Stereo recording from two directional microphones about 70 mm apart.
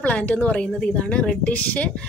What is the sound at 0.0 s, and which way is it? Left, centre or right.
A woman's voice, left.